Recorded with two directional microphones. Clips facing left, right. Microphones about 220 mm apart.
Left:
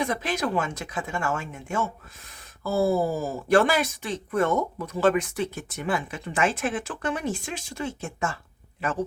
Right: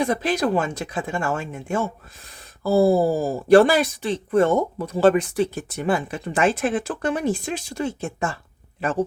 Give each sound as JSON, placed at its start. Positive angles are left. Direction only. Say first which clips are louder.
{"t": 0.0, "sound": "speech", "louder": "right 5 dB", "side_deg": -35}